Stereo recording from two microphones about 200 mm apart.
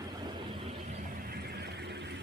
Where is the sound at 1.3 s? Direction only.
55° right (ahead or behind).